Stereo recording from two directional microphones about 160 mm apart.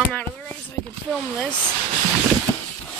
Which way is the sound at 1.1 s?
5° left (ahead or behind).